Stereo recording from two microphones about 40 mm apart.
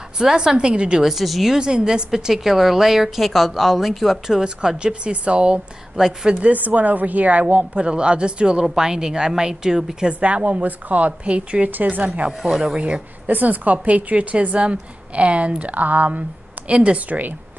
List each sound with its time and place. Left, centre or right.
0.2 s speech: centre
1.0 s a woman's voice: centre
1.5 s a woman's voice: right; by 4.4 s centre
4.4 s speech: right
5.9 s a woman's voice: centre
6.5 s a woman's voice: right; by 10.0 s centre
10.0 s a woman's voice: right
12.4 s a woman's voice: centre
12.7 s speech: right
13.3 s a woman's voice: right